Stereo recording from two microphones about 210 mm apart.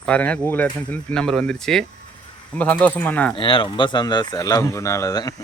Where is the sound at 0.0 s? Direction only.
5° left (ahead or behind).